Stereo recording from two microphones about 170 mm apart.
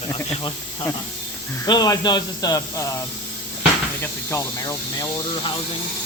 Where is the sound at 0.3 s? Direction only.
30° left (ahead or behind).